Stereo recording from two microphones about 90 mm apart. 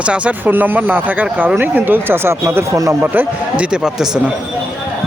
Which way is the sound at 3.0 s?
20° right (ahead or behind).